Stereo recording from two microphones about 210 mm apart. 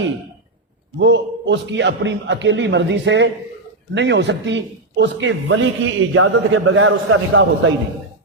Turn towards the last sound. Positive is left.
turn(degrees=-70)  # may be behind; listen again after turning